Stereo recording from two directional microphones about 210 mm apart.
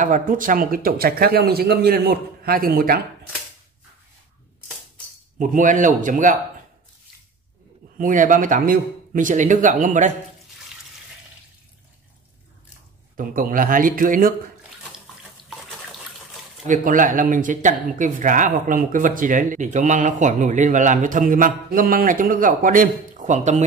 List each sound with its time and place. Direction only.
0.0 s speech: 40° right (ahead or behind)
5.4 s speech: 40° right (ahead or behind)
8.0 s speech: 40° right (ahead or behind)
13.1 s speech: 40° right (ahead or behind)
14.8 s water tap: centre (ahead or behind)
16.6 s speech: 40° right (ahead or behind)